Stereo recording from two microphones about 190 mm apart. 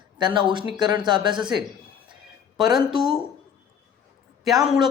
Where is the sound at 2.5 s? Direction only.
Centre (ahead or behind).